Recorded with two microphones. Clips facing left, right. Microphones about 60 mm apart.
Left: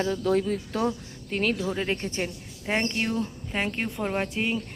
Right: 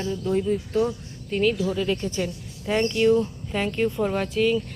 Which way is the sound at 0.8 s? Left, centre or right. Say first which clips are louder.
Even; left.